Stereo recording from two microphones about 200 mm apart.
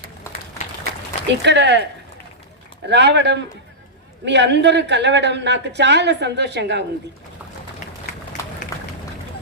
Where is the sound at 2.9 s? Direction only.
60° right (ahead or behind).